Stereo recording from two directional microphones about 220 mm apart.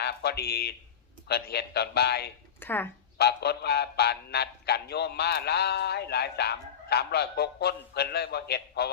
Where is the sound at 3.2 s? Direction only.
45° left (ahead or behind).